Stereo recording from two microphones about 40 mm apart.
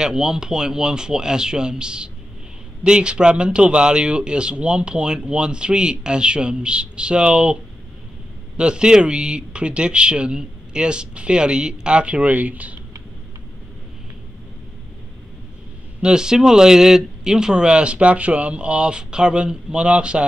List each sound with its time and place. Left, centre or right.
0.0 s a man's voice: centre
8.5 s a man's voice: right
16.0 s a man's voice: centre